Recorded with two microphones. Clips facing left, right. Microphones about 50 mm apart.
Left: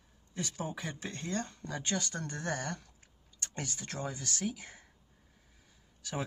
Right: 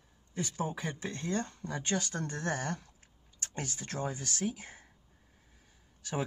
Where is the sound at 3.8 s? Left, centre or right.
Right.